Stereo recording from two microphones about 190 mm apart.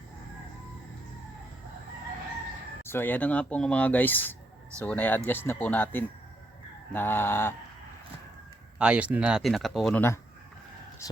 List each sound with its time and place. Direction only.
2.8 s speech: 10° left (ahead or behind)
8.8 s speech: 5° right (ahead or behind); by 11.2 s 15° left (ahead or behind)